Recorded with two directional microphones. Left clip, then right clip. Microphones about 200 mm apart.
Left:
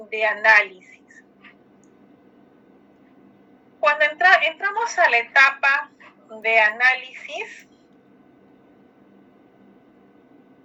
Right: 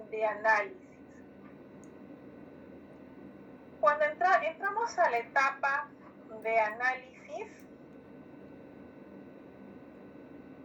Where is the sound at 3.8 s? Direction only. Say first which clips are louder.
Left 8 dB; 45° left (ahead or behind).